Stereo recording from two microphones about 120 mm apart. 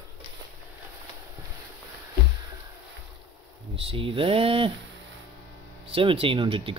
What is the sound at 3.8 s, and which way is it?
Speech, 50° right (ahead or behind).